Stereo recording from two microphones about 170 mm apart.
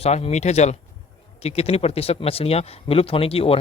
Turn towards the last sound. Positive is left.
turn(degrees=35)  # may be behind; listen again after turning